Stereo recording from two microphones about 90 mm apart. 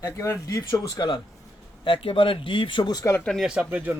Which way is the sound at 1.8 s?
85° left.